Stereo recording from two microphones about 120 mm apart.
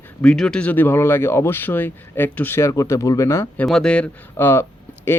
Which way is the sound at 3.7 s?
5° left (ahead or behind).